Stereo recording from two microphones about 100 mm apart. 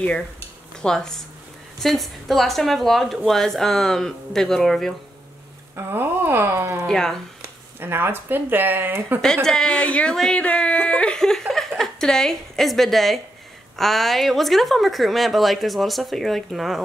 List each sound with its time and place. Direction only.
0.8 s a woman's voice: 5° left (ahead or behind)
5.8 s a sound: 20° right (ahead or behind)
6.9 s a woman's voice: 5° left (ahead or behind)
7.4 s speech: 20° right (ahead or behind)
9.2 s a woman's voice: 5° left (ahead or behind)